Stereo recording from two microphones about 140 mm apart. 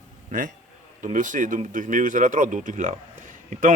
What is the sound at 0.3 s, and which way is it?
A man's voice, 70° right (ahead or behind).